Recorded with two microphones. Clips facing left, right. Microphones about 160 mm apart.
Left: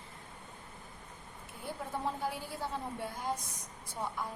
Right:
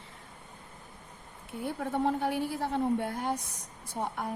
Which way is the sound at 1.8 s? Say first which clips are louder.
Right 7 dB; 65° right (ahead or behind).